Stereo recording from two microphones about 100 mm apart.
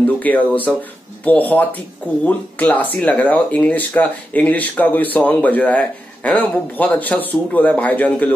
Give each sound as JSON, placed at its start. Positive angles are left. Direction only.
{"t": 0.2, "sound": "speech", "side_deg": 15}